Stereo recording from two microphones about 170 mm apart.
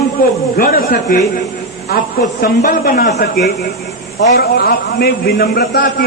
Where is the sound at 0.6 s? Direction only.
55° left (ahead or behind).